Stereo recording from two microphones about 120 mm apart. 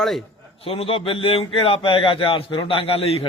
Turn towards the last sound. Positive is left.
turn(degrees=55)  # may be behind; listen again after turning